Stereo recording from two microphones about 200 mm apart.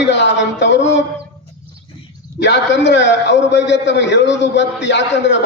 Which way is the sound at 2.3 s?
60° left (ahead or behind).